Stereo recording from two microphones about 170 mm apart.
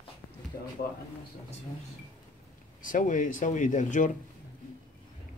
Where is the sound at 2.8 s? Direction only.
50° left (ahead or behind).